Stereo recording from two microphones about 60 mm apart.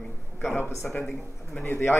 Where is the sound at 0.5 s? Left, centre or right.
Left.